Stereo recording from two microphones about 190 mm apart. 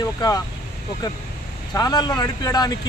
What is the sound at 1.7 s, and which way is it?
Speech, 20° left (ahead or behind).